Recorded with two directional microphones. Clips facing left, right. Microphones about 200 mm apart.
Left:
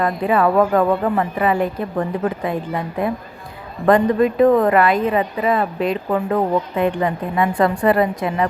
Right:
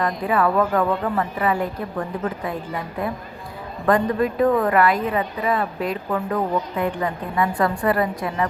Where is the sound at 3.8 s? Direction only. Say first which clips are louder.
Left 5 dB; 20° left (ahead or behind).